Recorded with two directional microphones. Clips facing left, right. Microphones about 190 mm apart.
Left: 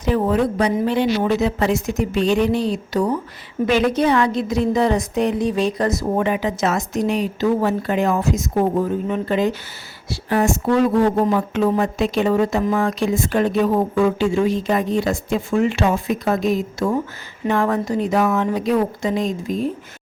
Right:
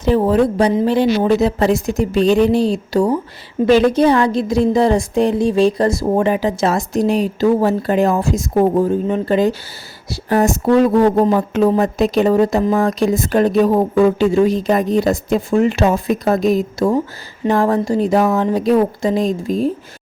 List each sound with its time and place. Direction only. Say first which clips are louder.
0.0 s speech: right 4 dB; 30° right (ahead or behind)